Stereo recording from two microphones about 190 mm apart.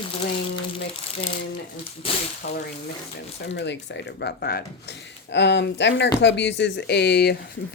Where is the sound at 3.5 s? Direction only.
70° left (ahead or behind).